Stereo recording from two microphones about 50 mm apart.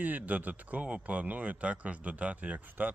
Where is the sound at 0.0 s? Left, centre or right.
Right.